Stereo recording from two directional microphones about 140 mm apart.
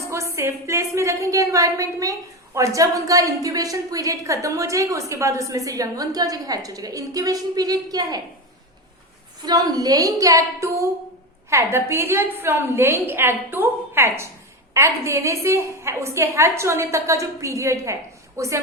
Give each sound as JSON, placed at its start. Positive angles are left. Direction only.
{"t": 0.1, "sound": "a woman's voice", "side_deg": -20}
{"t": 9.4, "sound": "a woman's voice", "side_deg": -30}